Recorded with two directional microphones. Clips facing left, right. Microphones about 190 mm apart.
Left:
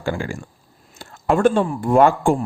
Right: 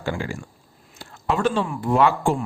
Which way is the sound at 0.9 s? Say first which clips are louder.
Left 5 dB; 50° left (ahead or behind).